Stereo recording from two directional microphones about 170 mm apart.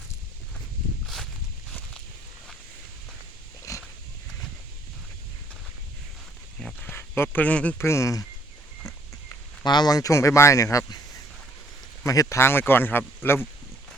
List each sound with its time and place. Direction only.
1.0 s walk: centre (ahead or behind)
3.7 s dog: 20° left (ahead or behind)
6.6 s a sound: centre (ahead or behind)
6.9 s speech: 10° left (ahead or behind)
9.3 s speech: 25° left (ahead or behind)
12.0 s speech: 20° left (ahead or behind)